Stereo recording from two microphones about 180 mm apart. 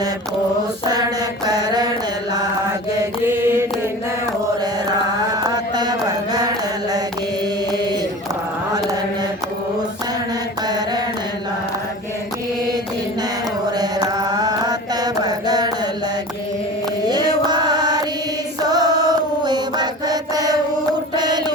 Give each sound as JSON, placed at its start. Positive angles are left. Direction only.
{"t": 1.5, "sound": "mantra", "side_deg": -20}
{"t": 3.2, "sound": "mantra", "side_deg": -15}
{"t": 5.3, "sound": "mantra", "side_deg": -20}
{"t": 10.7, "sound": "mantra", "side_deg": -20}
{"t": 13.7, "sound": "mantra", "side_deg": -20}
{"t": 17.1, "sound": "music", "side_deg": -25}
{"t": 18.6, "sound": "mantra", "side_deg": -20}
{"t": 21.2, "sound": "a sound", "side_deg": -25}